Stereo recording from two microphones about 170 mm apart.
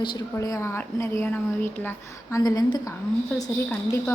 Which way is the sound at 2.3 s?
25° left (ahead or behind).